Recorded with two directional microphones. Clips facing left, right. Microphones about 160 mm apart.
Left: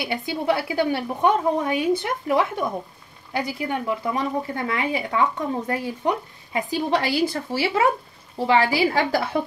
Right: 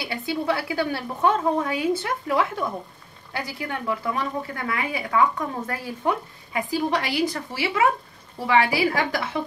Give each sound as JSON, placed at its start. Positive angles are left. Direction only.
{"t": 0.0, "sound": "a woman's voice", "side_deg": 20}